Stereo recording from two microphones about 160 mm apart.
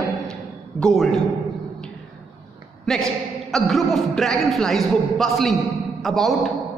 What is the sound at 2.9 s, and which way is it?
A man's voice, centre (ahead or behind).